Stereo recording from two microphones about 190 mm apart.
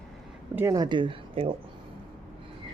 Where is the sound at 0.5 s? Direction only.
15° right (ahead or behind).